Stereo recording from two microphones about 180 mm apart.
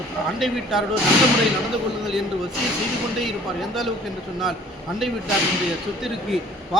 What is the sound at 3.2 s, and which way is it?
Speech, centre (ahead or behind).